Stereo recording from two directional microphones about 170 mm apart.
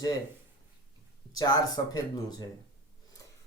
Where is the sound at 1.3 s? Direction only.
20° left (ahead or behind).